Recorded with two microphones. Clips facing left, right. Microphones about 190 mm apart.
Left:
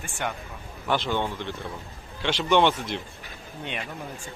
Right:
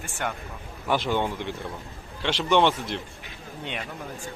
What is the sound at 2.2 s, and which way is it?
Speech, centre (ahead or behind).